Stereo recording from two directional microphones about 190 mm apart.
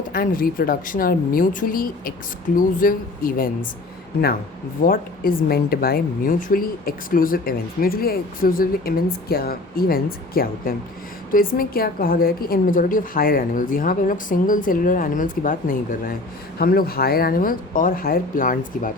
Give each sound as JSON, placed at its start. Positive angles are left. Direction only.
{"t": 0.1, "sound": "a woman's voice", "side_deg": 50}
{"t": 4.8, "sound": "a woman's voice", "side_deg": 50}